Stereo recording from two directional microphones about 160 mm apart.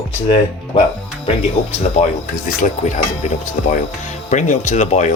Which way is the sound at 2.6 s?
50° left (ahead or behind).